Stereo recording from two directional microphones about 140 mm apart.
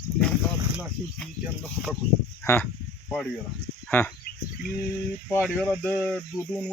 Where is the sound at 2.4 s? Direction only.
15° left (ahead or behind).